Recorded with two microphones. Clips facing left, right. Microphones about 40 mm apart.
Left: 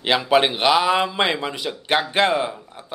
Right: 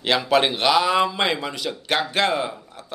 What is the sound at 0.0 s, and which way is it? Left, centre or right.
A man's voice, centre.